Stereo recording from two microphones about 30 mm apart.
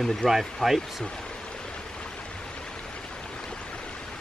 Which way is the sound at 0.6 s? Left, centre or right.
Centre.